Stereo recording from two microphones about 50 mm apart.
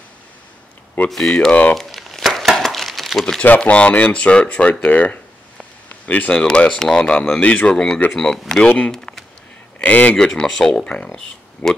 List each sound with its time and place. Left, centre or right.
1.0 s speech: left
1.8 s crumpling: centre
3.4 s speech: left
3.7 s speech: left
4.8 s a sound: left
6.3 s speech: centre
8.6 s speech: left
8.9 s a sound: centre
9.8 s a man's voice: left
10.1 s speech: centre